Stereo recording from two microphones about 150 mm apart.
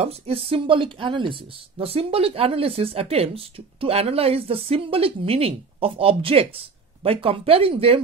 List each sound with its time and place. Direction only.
0.0 s speech: 40° right (ahead or behind)